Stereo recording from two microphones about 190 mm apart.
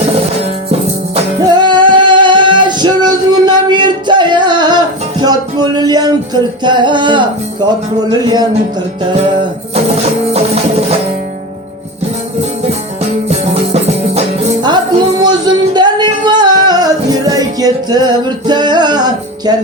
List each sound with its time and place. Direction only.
1.1 s music: 25° right (ahead or behind)
8.1 s speech: 20° right (ahead or behind)
10.3 s music: 35° right (ahead or behind)
13.2 s music: 35° right (ahead or behind)